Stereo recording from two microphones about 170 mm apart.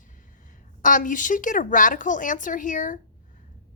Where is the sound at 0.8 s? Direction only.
50° left (ahead or behind).